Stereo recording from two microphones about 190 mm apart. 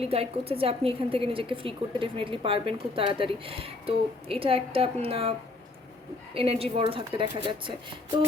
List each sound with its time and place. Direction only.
0.0 s a woman's voice: 30° right (ahead or behind)
6.3 s a woman's voice: 30° right (ahead or behind)